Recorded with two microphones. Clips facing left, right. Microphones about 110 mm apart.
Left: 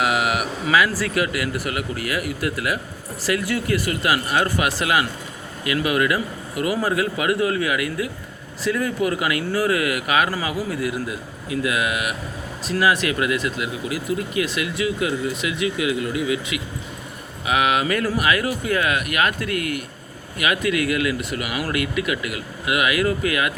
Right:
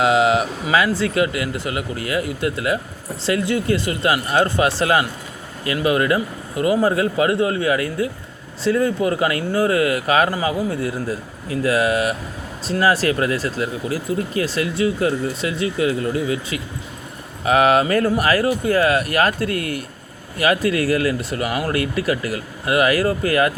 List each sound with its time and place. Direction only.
0.0 s speech: 25° right (ahead or behind)